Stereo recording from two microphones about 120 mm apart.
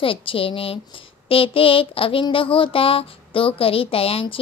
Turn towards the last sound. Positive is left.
turn(degrees=50)  # may be behind; listen again after turning